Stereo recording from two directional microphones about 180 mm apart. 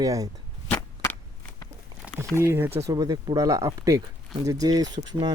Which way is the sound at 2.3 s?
15° right (ahead or behind).